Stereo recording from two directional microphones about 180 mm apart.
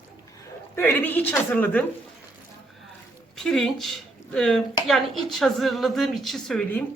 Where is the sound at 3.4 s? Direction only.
Centre (ahead or behind).